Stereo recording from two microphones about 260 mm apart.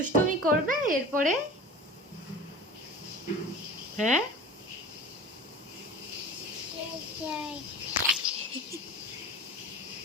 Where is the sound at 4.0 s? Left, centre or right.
Right.